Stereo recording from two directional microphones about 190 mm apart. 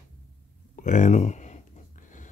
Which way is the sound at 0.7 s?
40° left (ahead or behind).